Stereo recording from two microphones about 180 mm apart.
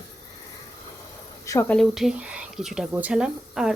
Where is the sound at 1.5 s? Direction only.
15° left (ahead or behind).